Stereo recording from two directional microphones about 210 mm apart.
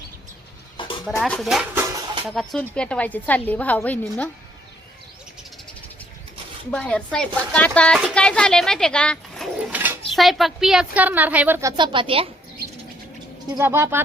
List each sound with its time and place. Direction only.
0.8 s a sound: 25° left (ahead or behind)
1.2 s speech: centre (ahead or behind)
6.7 s speech: 5° left (ahead or behind)
9.7 s dishes: 5° right (ahead or behind)
10.2 s a woman's voice: centre (ahead or behind)
11.8 s a woman's voice: 25° right (ahead or behind)
13.6 s a woman's voice: 10° right (ahead or behind)